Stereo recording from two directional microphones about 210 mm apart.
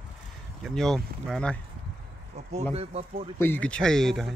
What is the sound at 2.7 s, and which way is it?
Speech, 30° right (ahead or behind).